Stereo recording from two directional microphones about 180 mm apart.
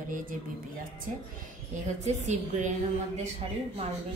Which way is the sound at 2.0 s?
40° right (ahead or behind).